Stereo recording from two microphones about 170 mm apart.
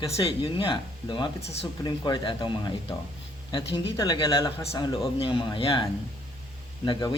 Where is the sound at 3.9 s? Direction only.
25° left (ahead or behind).